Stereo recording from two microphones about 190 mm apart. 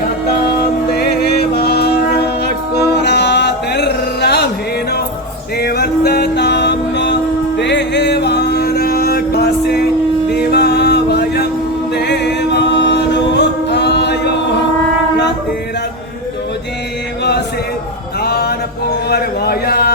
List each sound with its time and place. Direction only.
0.9 s music: 55° left (ahead or behind)
5.5 s music: 55° left (ahead or behind)
11.9 s a capella: 60° left (ahead or behind)
18.2 s a sound: 55° left (ahead or behind)